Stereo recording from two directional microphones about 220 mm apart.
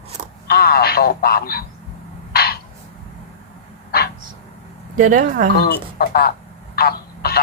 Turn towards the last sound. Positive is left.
turn(degrees=45)  # may be behind; listen again after turning